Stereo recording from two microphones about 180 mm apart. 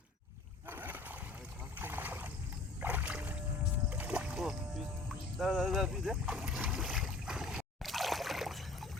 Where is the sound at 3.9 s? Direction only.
5° right (ahead or behind).